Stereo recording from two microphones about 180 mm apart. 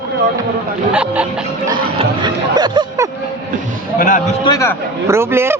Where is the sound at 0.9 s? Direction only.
5° right (ahead or behind).